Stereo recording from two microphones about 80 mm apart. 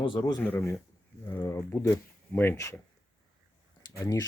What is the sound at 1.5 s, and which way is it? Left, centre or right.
Speech, left.